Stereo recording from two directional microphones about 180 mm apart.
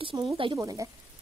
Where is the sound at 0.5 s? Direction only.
20° right (ahead or behind).